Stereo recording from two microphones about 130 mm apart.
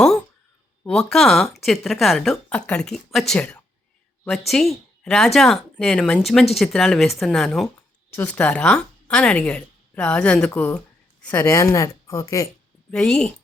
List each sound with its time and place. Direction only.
0.9 s a woman's voice: 5° left (ahead or behind)
8.1 s a woman's voice: 15° left (ahead or behind)
12.9 s a woman's voice: 5° left (ahead or behind)